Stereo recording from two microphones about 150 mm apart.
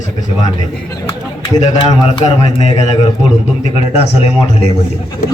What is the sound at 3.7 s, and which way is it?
Music, 40° left (ahead or behind).